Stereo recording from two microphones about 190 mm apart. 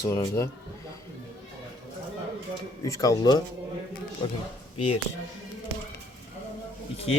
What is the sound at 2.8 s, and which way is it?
Speech, 15° left (ahead or behind).